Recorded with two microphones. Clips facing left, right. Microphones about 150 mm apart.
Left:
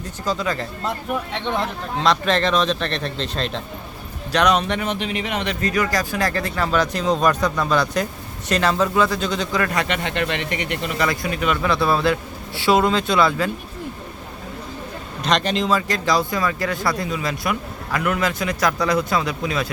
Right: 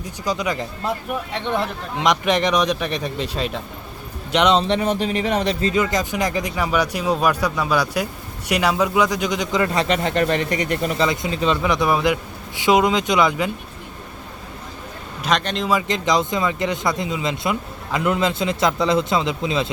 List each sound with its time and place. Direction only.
0.0 s a man's voice: 15° right (ahead or behind)
1.3 s a man's voice: centre (ahead or behind)
2.0 s a man's voice: 15° right (ahead or behind)
4.3 s speech: 20° right (ahead or behind); by 5.5 s 40° right (ahead or behind)
5.5 s a man's voice: 25° right (ahead or behind); by 10.9 s 40° right (ahead or behind)
10.9 s a man's voice: 20° right (ahead or behind)
15.2 s a man's voice: centre (ahead or behind)
15.7 s speech: 20° right (ahead or behind)